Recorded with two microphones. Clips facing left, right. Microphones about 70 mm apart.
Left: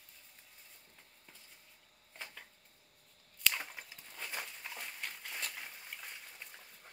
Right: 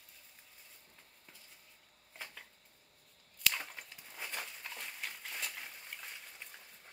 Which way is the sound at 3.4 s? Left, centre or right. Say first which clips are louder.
Even; centre.